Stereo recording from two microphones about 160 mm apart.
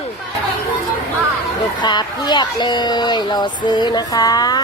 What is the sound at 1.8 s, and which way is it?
Speech, 25° left (ahead or behind).